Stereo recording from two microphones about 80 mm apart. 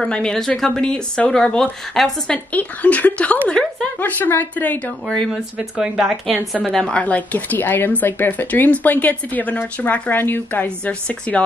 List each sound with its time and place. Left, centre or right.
0.0 s a woman's voice: centre
2.5 s speech: centre
5.0 s a woman's voice: centre
5.3 s speech: centre
6.7 s speech: centre